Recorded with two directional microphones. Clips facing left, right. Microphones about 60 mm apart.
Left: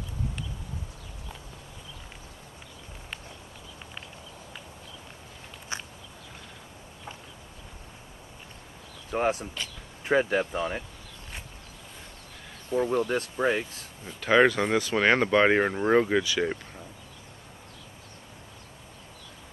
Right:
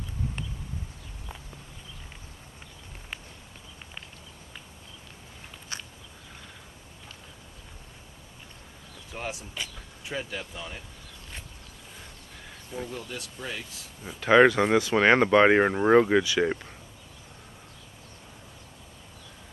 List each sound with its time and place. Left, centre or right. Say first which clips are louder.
5.7 s a sound: left 3 dB; left
9.1 s speech: left 9 dB; left
12.9 s speech: left 11 dB; left
14.0 s speech: right 2 dB; centre
14.8 s speech: right 2 dB; centre